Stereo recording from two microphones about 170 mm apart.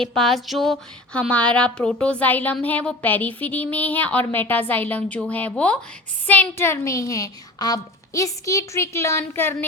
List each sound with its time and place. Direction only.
0.0 s speech: 5° left (ahead or behind)